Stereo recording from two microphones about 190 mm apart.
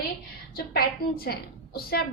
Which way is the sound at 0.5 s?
50° left (ahead or behind).